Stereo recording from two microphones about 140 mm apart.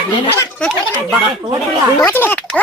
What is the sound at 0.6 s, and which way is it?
Speech, centre (ahead or behind).